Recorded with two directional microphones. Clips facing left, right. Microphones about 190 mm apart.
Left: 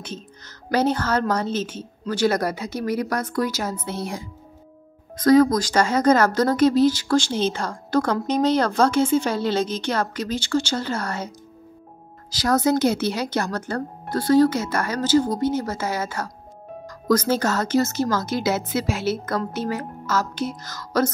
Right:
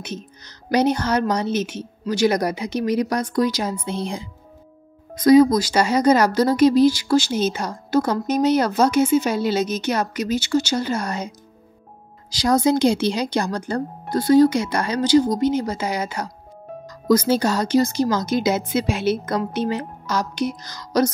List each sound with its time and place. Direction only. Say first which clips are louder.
0.7 s speech: right 2 dB; 15° right (ahead or behind)
12.6 s speech: right 2 dB; 15° right (ahead or behind)